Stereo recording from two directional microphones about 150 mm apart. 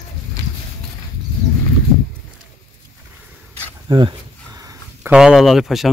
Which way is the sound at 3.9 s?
30° right (ahead or behind).